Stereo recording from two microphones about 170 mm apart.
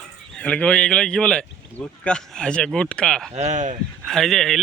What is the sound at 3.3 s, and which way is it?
Speech, 40° right (ahead or behind).